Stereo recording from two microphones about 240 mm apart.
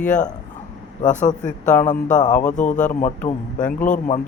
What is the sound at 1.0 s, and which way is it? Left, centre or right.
Speech, left.